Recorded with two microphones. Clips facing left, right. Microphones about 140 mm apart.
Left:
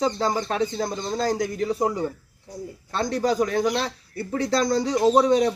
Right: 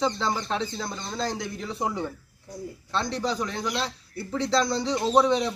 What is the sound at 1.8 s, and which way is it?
Speech, 5° left (ahead or behind).